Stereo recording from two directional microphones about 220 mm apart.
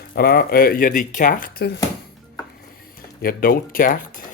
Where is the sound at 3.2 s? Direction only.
40° left (ahead or behind).